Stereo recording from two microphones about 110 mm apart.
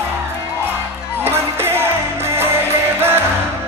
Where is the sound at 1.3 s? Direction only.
20° right (ahead or behind).